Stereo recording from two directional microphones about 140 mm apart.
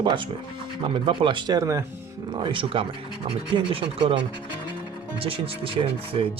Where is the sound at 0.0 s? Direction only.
35° right (ahead or behind).